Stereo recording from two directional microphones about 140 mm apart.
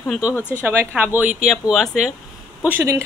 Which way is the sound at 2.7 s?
20° right (ahead or behind).